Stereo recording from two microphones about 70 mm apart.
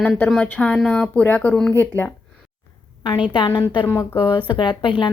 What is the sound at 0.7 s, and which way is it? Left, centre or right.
Speech, centre.